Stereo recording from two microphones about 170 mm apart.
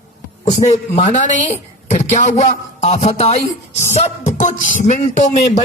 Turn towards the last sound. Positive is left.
turn(degrees=45)  # may be behind; listen again after turning